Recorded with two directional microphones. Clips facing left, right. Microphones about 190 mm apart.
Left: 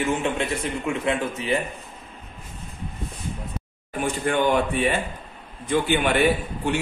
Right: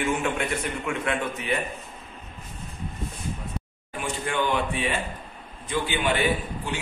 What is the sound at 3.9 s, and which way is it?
A man's voice, 50° left (ahead or behind).